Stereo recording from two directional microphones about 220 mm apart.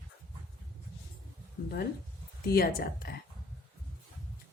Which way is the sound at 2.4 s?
45° left (ahead or behind).